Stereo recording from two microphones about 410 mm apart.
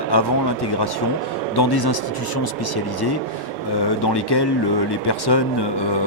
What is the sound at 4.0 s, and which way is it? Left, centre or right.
Speech, left.